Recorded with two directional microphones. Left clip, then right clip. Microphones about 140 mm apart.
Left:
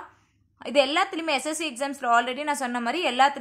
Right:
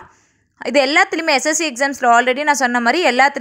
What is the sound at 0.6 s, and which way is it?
A woman's voice, 50° right (ahead or behind).